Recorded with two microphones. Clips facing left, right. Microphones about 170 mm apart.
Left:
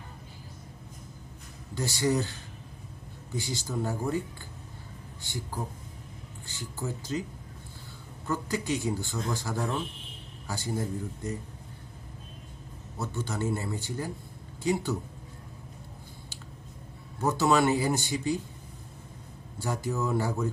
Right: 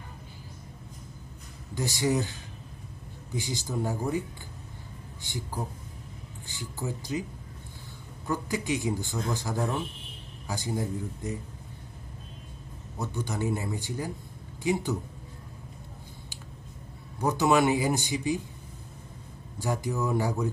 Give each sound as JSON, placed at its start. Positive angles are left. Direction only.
{"t": 1.7, "sound": "speech", "side_deg": -15}
{"t": 5.2, "sound": "speech", "side_deg": -20}
{"t": 8.3, "sound": "speech", "side_deg": -15}
{"t": 13.0, "sound": "speech", "side_deg": -15}
{"t": 17.2, "sound": "speech", "side_deg": -15}
{"t": 19.5, "sound": "speech", "side_deg": -15}